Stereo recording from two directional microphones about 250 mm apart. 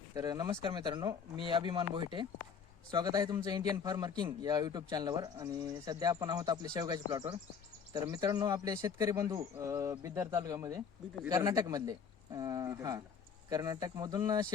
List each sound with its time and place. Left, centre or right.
0.1 s speech: centre